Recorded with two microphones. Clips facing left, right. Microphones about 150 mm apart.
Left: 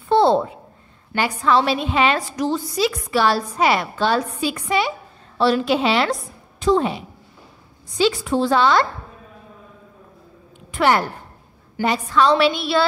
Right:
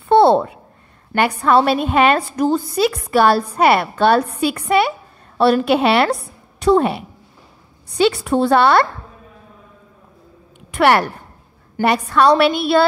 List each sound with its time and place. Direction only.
0.1 s a sound: 65° right (ahead or behind)
1.1 s a woman's voice: 60° right (ahead or behind)
10.7 s a woman's voice: 65° right (ahead or behind)
12.1 s a woman's voice: 60° right (ahead or behind)